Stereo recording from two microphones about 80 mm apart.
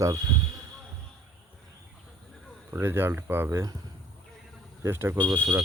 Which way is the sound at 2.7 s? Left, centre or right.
Right.